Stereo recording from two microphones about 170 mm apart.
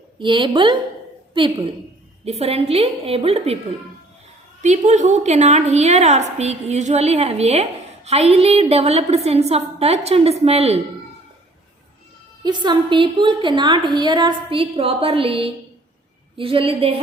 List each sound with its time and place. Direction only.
0.2 s a woman's voice: 30° right (ahead or behind)
4.6 s a woman's voice: 45° right (ahead or behind)
12.4 s a woman's voice: 25° right (ahead or behind)